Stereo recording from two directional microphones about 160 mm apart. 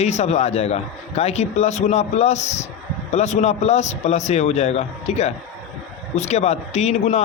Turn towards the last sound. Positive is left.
turn(degrees=45)  # may be behind; listen again after turning